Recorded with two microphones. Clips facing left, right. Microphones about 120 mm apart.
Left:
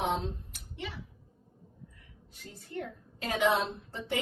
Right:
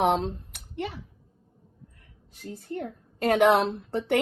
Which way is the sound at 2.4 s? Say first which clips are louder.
Right 5 dB; 45° right (ahead or behind).